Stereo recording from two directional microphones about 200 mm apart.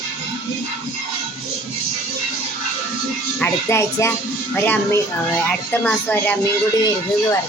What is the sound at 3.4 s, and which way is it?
Speech, 10° left (ahead or behind).